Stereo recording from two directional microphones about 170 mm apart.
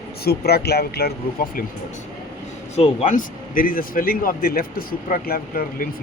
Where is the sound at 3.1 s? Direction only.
55° left (ahead or behind).